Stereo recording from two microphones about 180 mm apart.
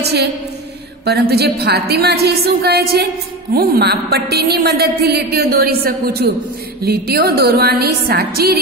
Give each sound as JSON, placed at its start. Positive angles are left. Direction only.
{"t": 0.0, "sound": "a woman's voice", "side_deg": -65}
{"t": 1.3, "sound": "a woman's voice", "side_deg": -60}